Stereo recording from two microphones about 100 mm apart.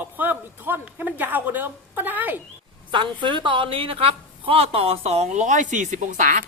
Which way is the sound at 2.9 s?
55° right (ahead or behind).